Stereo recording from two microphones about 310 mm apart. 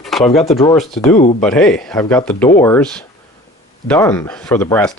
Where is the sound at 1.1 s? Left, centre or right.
Left.